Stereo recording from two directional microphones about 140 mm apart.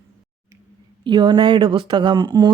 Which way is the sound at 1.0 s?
30° right (ahead or behind).